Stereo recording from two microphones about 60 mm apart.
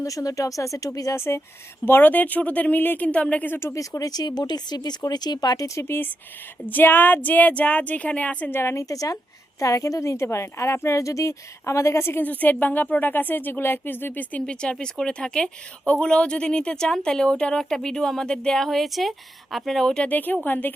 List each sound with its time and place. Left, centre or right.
0.0 s speech: left
1.1 s speech: left
1.8 s a woman's voice: left
3.1 s a woman's voice: left
3.5 s speech: left
3.8 s speech: left
5.5 s a woman's voice: left
5.8 s a woman's voice: left
8.4 s speech: left
8.7 s a woman's voice: left
12.2 s speech: left
14.4 s speech: centre
20.1 s speech: left